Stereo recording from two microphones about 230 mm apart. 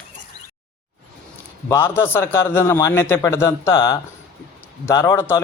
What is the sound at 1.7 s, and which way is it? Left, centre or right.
A man's voice, centre.